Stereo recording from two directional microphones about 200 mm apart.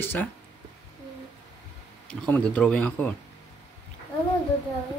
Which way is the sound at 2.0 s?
5° left (ahead or behind).